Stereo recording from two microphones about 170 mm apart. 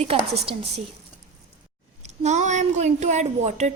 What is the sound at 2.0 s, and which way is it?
A woman's voice, 40° right (ahead or behind).